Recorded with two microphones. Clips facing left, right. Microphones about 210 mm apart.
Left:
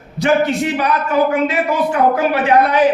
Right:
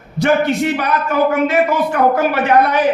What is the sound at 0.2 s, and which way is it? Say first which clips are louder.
A man's voice: right 1 dB; 55° right (ahead or behind).